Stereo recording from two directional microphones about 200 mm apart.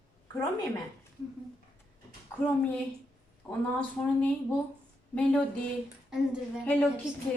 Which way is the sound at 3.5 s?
5° left (ahead or behind).